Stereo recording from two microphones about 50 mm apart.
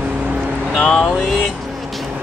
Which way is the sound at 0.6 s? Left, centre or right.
Centre.